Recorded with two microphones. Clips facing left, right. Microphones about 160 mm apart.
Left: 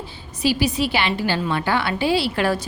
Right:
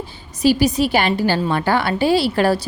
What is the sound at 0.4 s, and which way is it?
A woman's voice, 40° right (ahead or behind).